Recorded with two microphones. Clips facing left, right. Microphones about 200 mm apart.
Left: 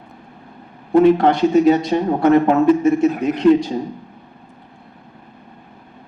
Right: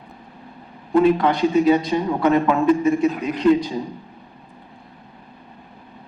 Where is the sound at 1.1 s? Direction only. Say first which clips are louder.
Left 4 dB; 50° left (ahead or behind).